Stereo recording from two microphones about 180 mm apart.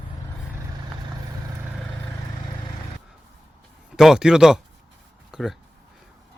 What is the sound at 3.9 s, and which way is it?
Speech, centre (ahead or behind).